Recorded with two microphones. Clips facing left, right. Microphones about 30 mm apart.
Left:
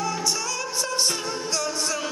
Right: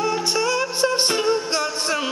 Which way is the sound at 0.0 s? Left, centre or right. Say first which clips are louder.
Right 5 dB; right.